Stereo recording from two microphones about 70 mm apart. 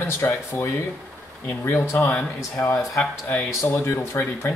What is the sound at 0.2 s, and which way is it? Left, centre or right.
Speech, left.